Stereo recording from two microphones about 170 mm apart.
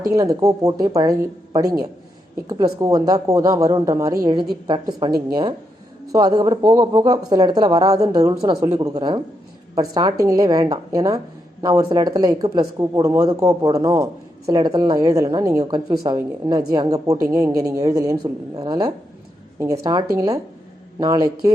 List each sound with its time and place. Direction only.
0.1 s speech: 20° right (ahead or behind)
2.8 s speech: 20° right (ahead or behind)